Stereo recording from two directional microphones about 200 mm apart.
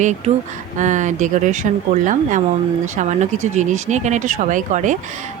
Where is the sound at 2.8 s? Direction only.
40° right (ahead or behind).